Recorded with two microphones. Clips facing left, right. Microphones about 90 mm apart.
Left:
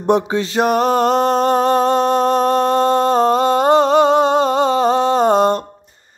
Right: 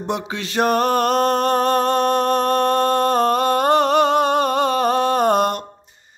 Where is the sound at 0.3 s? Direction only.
25° left (ahead or behind).